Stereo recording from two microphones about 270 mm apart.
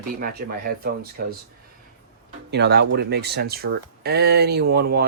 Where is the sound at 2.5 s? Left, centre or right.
Right.